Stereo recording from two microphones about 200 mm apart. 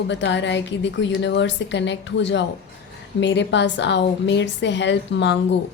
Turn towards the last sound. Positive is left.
turn(degrees=60)  # may be behind; listen again after turning